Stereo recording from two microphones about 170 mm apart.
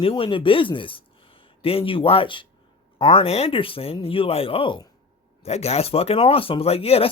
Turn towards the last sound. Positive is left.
turn(degrees=35)  # may be behind; listen again after turning